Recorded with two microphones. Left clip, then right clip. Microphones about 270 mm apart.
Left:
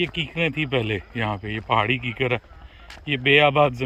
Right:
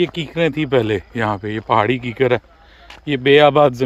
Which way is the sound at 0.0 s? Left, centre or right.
Centre.